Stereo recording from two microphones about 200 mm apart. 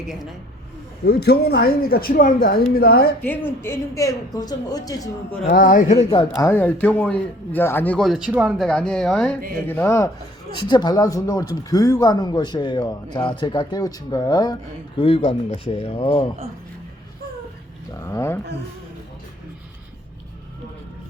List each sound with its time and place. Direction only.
1.0 s speech: 55° left (ahead or behind)
3.2 s a man's voice: 10° left (ahead or behind)
5.5 s speech: 45° left (ahead or behind)
6.1 s a man's voice: 15° left (ahead or behind)
18.0 s a man's voice: 15° left (ahead or behind)